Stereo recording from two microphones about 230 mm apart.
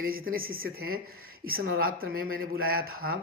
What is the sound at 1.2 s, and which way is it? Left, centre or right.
Speech, right.